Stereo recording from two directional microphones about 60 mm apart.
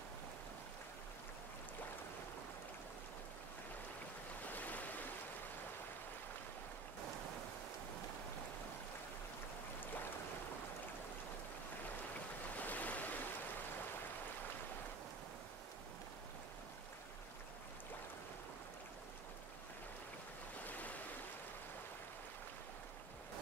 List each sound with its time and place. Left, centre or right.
4.5 s waves: left
12.5 s waves: left
20.6 s stream: left